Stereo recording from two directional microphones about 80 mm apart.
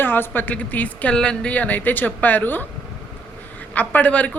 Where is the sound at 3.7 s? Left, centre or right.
Left.